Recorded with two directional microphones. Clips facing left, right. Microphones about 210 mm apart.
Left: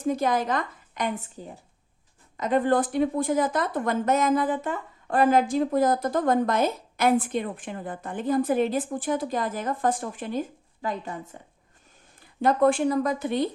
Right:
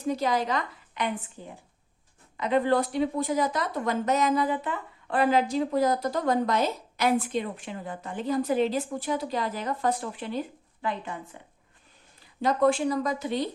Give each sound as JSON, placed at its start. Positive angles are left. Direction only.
{"t": 0.0, "sound": "speech", "side_deg": 50}
{"t": 2.4, "sound": "speech", "side_deg": 45}
{"t": 12.2, "sound": "speech", "side_deg": 50}